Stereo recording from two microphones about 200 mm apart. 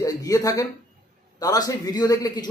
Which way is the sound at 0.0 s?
20° left (ahead or behind).